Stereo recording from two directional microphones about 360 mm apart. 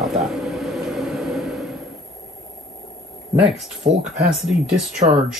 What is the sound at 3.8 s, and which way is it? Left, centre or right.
Speech, centre.